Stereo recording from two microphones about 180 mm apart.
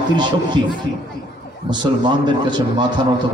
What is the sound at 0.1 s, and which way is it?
Speech, 25° right (ahead or behind).